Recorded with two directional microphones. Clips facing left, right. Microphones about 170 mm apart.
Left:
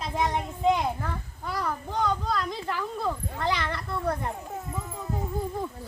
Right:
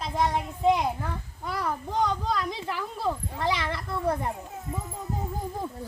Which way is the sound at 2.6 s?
20° right (ahead or behind).